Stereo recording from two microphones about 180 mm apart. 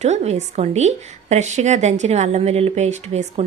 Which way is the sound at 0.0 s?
40° right (ahead or behind).